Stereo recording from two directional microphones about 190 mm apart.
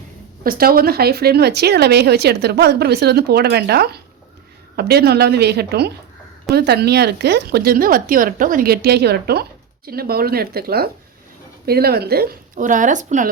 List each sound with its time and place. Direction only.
0.4 s speech: 50° right (ahead or behind)